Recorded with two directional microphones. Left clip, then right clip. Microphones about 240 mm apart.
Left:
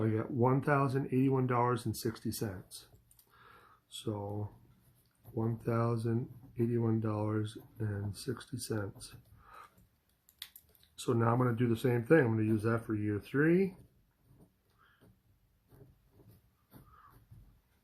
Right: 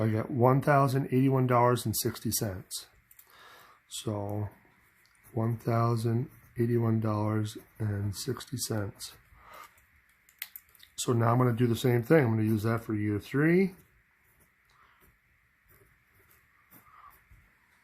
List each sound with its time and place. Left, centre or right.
0.0 s speech: right
3.3 s a sound: right
5.4 s speech: right
10.8 s speech: right